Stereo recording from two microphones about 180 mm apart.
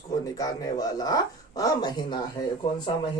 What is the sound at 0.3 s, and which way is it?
Speech, 20° left (ahead or behind).